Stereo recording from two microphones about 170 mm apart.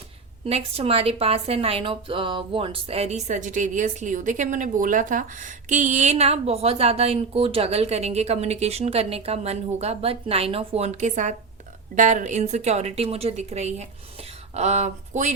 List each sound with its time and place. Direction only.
0.4 s speech: 35° right (ahead or behind)